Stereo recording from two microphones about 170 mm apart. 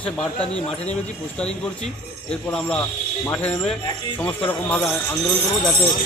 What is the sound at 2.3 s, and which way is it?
A man's voice, 5° left (ahead or behind).